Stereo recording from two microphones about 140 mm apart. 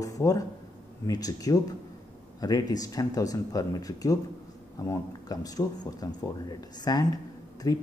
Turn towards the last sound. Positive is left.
turn(degrees=25)  # may be behind; listen again after turning